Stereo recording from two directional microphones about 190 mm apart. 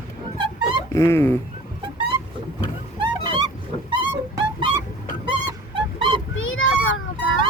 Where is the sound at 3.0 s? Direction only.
25° right (ahead or behind).